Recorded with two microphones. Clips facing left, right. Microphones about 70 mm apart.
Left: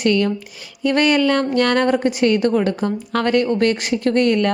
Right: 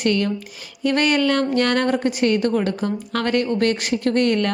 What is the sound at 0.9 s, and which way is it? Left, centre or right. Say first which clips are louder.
Speech: left 3 dB; left.